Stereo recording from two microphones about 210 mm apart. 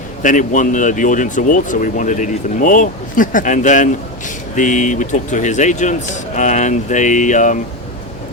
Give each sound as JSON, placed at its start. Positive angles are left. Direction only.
{"t": 0.2, "sound": "speech", "side_deg": 40}